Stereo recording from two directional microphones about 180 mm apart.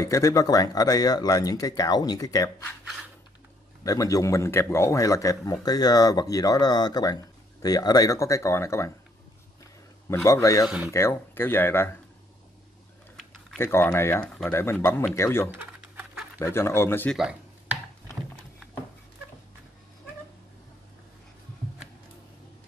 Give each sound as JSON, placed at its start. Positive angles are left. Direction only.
{"t": 0.0, "sound": "speech", "side_deg": 20}
{"t": 3.8, "sound": "speech", "side_deg": 20}
{"t": 10.0, "sound": "speech", "side_deg": 15}
{"t": 13.6, "sound": "speech", "side_deg": 15}
{"t": 17.2, "sound": "a sound", "side_deg": -5}